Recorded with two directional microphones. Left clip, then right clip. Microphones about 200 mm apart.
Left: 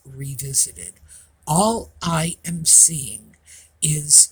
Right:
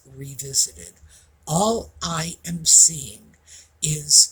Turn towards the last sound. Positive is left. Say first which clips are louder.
# even
turn(degrees=50)  # may be behind; listen again after turning